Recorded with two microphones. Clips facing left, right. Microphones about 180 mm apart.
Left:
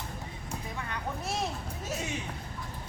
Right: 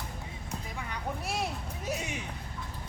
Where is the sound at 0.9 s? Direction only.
10° right (ahead or behind).